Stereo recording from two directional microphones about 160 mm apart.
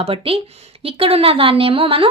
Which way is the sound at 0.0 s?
35° right (ahead or behind).